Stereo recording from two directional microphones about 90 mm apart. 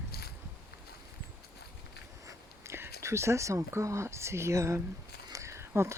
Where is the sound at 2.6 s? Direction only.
30° right (ahead or behind).